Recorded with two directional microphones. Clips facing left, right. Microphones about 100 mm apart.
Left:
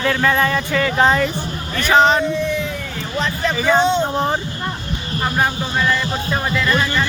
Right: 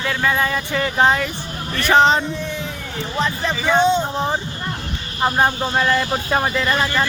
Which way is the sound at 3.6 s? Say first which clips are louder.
Left 1 dB; 10° left (ahead or behind).